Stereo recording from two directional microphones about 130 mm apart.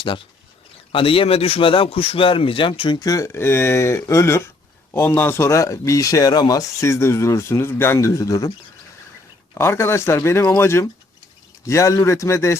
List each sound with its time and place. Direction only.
0.9 s speech: 45° left (ahead or behind); by 8.5 s 25° left (ahead or behind)
9.6 s speech: 20° left (ahead or behind)